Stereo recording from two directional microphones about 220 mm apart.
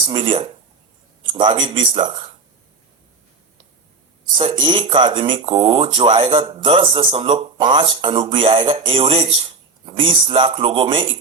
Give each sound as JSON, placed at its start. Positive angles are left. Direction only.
{"t": 0.1, "sound": "speech", "side_deg": -25}
{"t": 4.4, "sound": "speech", "side_deg": -20}